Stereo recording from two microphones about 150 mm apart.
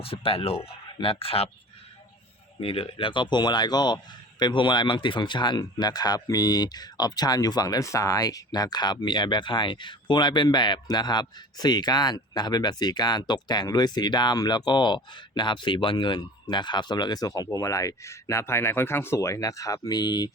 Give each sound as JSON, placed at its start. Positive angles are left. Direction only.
{"t": 0.0, "sound": "speech", "side_deg": 40}
{"t": 2.6, "sound": "speech", "side_deg": 35}